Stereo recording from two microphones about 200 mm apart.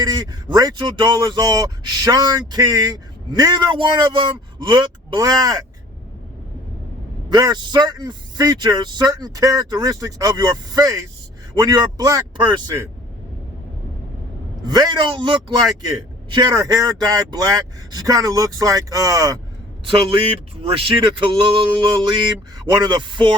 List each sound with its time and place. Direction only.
0.0 s speech: 20° right (ahead or behind)
7.3 s speech: 20° right (ahead or behind)
14.6 s a man's voice: 20° right (ahead or behind)